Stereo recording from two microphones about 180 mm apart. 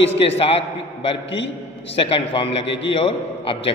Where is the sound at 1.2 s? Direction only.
85° left.